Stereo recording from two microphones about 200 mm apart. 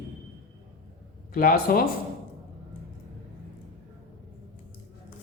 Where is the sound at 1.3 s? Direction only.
45° left (ahead or behind).